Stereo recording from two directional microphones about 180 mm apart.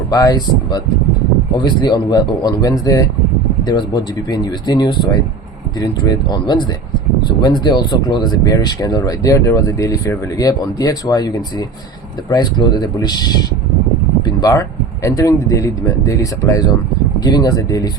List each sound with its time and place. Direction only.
0.1 s speech: 20° left (ahead or behind)
14.3 s a sound: 20° left (ahead or behind)
15.0 s speech: 20° left (ahead or behind)